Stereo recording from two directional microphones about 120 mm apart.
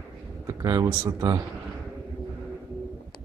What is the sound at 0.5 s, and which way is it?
Speech, 30° right (ahead or behind).